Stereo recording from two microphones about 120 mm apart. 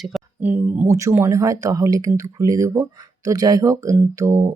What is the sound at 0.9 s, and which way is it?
Speech, 25° right (ahead or behind).